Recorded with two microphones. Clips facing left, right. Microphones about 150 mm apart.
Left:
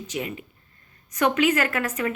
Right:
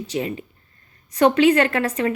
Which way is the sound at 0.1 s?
35° right (ahead or behind).